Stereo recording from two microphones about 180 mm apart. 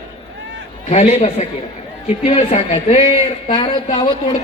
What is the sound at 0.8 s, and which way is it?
A man's voice, 35° left (ahead or behind).